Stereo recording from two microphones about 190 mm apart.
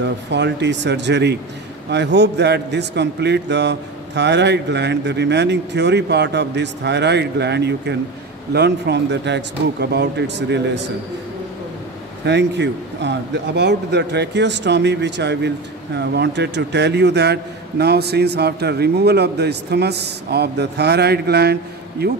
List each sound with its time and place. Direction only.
0.0 s a man's voice: 65° right (ahead or behind)
12.3 s a man's voice: 65° right (ahead or behind)